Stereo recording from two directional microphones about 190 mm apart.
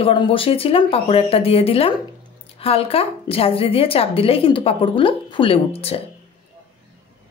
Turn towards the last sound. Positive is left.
turn(degrees=30)  # may be behind; listen again after turning